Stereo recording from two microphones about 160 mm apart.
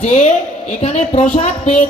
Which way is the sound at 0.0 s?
45° left (ahead or behind).